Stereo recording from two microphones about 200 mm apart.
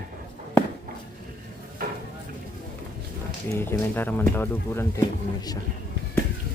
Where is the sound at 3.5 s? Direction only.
10° left (ahead or behind).